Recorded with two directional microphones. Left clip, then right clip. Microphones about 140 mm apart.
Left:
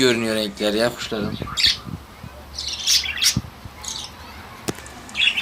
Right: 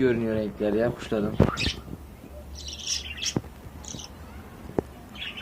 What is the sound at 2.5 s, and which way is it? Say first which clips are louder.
Bird: left 12 dB; 15° left (ahead or behind).